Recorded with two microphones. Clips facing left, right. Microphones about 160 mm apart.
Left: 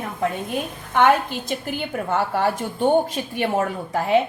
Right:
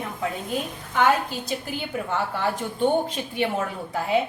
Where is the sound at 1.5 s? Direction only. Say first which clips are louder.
Left 3 dB; 55° left (ahead or behind).